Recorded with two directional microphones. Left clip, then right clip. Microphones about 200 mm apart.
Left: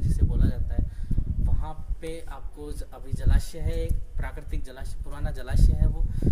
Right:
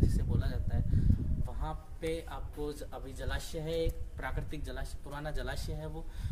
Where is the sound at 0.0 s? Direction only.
Centre (ahead or behind).